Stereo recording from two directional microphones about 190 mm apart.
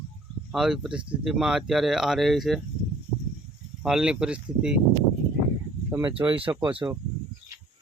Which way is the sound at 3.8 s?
5° right (ahead or behind).